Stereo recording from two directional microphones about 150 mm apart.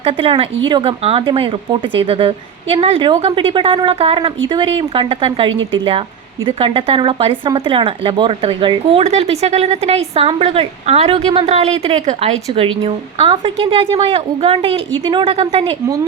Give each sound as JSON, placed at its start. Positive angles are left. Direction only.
{"t": 0.0, "sound": "a woman's voice", "side_deg": -35}